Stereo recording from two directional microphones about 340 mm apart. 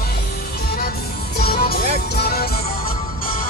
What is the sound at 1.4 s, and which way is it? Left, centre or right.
Music, left.